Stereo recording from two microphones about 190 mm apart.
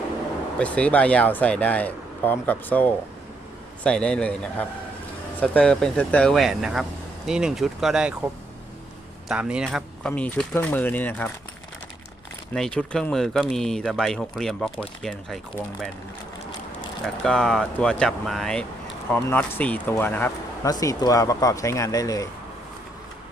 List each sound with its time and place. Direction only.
0.6 s speech: 5° left (ahead or behind)
9.3 s speech: 5° right (ahead or behind)
12.5 s speech: 5° left (ahead or behind)
17.2 s speech: 5° left (ahead or behind)